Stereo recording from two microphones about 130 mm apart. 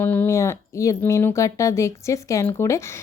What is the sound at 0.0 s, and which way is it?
A woman's voice, 15° left (ahead or behind).